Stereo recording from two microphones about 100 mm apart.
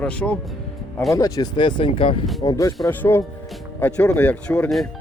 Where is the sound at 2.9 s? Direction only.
20° left (ahead or behind).